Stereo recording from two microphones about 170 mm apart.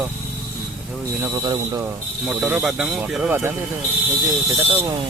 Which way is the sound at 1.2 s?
15° right (ahead or behind).